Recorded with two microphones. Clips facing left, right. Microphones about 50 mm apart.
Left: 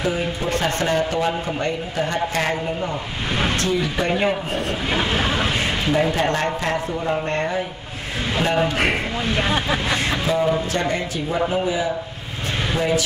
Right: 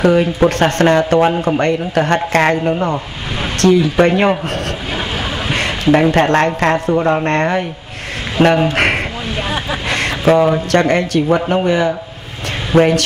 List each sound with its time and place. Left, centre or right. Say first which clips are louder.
0.0 s speech: right 11 dB; right
4.9 s vehicle: left 2 dB; centre
5.5 s a sound: right 7 dB; right
6.1 s speech: right 8 dB; right
7.2 s speech: right 7 dB; right
8.4 s speech: right 11 dB; right
8.7 s speech: right 6 dB; right
9.3 s speech: left 1 dB; centre
9.8 s speech: right 7 dB; right